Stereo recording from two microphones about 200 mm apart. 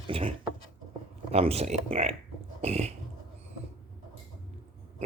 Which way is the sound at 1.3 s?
30° right (ahead or behind).